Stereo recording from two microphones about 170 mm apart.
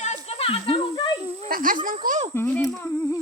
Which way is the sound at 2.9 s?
20° left (ahead or behind).